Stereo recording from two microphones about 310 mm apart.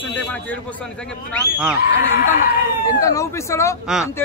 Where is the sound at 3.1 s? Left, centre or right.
Centre.